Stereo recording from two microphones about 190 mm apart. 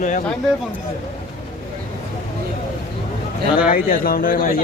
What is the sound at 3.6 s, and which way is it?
Speech, 50° left (ahead or behind).